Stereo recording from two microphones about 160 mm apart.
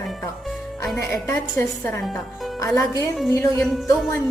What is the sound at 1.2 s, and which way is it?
A woman's voice, 20° left (ahead or behind).